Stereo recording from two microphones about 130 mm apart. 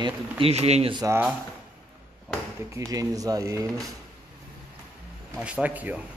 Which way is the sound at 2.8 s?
25° right (ahead or behind).